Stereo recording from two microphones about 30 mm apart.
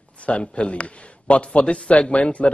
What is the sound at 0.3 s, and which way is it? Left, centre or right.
A man's voice, left.